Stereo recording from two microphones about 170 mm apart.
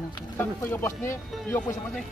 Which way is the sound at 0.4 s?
10° left (ahead or behind).